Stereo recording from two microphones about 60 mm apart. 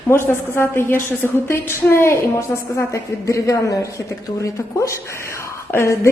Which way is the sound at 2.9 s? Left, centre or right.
Left.